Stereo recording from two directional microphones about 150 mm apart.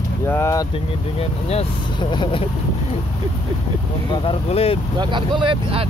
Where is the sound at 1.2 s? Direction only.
45° left (ahead or behind).